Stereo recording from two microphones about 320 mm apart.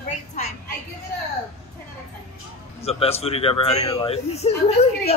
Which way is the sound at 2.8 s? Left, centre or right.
Centre.